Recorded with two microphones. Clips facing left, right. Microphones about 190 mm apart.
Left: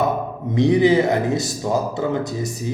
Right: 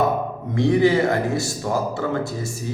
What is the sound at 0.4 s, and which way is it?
A man's voice, 20° left (ahead or behind).